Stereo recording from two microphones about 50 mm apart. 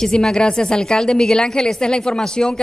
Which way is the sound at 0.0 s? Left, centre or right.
Centre.